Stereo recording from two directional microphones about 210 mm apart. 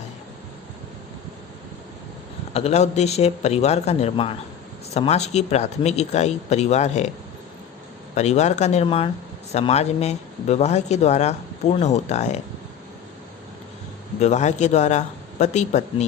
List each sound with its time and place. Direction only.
2.5 s speech: 30° left (ahead or behind)
8.1 s speech: 30° left (ahead or behind)
14.2 s speech: 35° left (ahead or behind)